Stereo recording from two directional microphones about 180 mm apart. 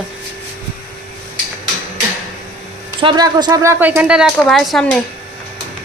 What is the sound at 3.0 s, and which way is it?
A woman's voice, 25° right (ahead or behind).